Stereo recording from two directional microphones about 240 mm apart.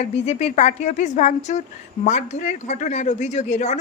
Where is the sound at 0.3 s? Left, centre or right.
Left.